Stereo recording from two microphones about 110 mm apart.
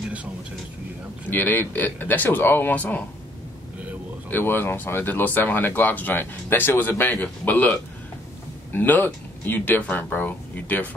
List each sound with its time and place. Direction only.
1.3 s speech: 15° left (ahead or behind)
4.3 s speech: 20° left (ahead or behind)
8.7 s speech: 15° left (ahead or behind)